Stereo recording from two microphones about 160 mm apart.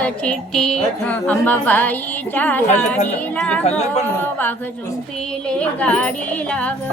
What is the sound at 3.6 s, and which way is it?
Speech, 45° left (ahead or behind).